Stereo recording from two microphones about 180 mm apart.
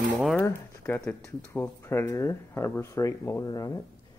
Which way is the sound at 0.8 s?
10° left (ahead or behind).